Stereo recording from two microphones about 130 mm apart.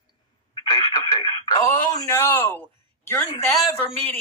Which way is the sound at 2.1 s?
20° left (ahead or behind).